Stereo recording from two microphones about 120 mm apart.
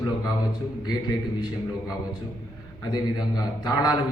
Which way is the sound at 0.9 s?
35° left (ahead or behind).